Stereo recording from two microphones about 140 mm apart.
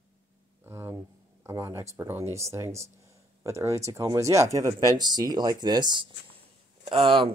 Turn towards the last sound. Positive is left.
turn(degrees=-40)  # may be behind; listen again after turning